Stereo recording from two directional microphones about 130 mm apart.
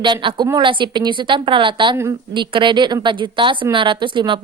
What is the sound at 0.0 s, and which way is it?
A woman's voice, 35° right (ahead or behind).